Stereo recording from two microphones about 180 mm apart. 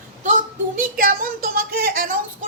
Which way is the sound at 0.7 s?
50° right (ahead or behind).